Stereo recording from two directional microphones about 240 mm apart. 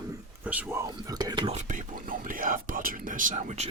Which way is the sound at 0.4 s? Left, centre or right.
Centre.